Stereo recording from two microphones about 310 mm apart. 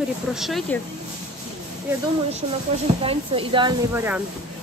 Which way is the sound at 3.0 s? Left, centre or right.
Centre.